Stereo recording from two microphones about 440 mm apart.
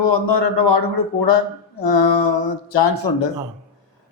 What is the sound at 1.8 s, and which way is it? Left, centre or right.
A man's voice, left.